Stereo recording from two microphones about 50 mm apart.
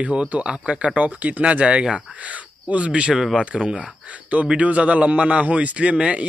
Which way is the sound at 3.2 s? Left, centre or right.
Centre.